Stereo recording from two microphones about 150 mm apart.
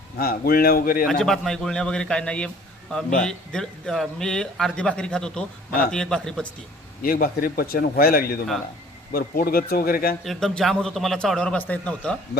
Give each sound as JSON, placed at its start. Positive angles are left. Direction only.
{"t": 0.2, "sound": "a man's voice", "side_deg": 80}
{"t": 1.0, "sound": "speech", "side_deg": 0}
{"t": 7.0, "sound": "a man's voice", "side_deg": 75}
{"t": 10.2, "sound": "speech", "side_deg": 0}